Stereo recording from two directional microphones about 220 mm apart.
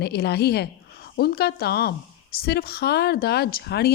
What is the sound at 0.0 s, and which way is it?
A woman's voice, 45° left (ahead or behind).